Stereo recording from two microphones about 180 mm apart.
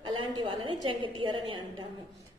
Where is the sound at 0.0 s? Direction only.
25° right (ahead or behind).